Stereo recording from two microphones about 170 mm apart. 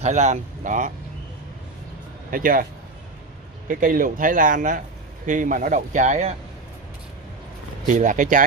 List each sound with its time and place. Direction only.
0.0 s speech: 45° right (ahead or behind)
2.3 s a man's voice: 55° right (ahead or behind)
3.6 s speech: 55° right (ahead or behind)
7.9 s speech: 50° right (ahead or behind)